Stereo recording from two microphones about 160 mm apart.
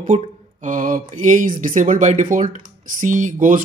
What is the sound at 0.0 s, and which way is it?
Speech, 50° right (ahead or behind).